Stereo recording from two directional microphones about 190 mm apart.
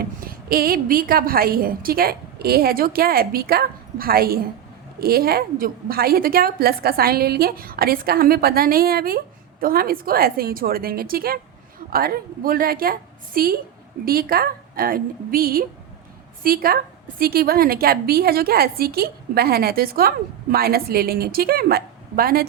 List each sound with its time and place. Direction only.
0.2 s a woman's voice: 50° right (ahead or behind)